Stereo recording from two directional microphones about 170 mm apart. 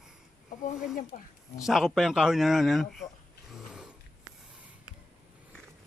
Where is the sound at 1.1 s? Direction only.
50° left (ahead or behind).